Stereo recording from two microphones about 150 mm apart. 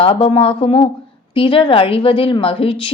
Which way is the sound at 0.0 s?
35° left (ahead or behind).